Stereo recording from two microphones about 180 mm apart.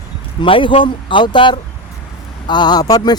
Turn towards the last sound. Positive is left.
turn(degrees=20)  # may be behind; listen again after turning